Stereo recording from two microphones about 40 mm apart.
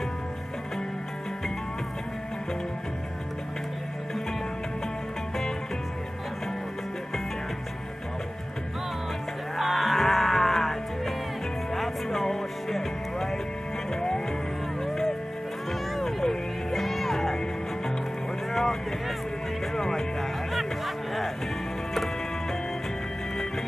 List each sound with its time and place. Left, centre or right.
9.6 s music: centre
16.0 s music: centre
18.5 s vehicle: centre
19.7 s music: centre
20.5 s music: centre